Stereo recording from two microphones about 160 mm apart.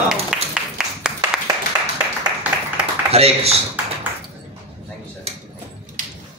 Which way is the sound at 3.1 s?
40° right (ahead or behind).